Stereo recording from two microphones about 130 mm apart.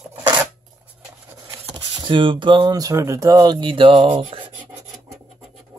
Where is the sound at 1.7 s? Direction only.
40° right (ahead or behind).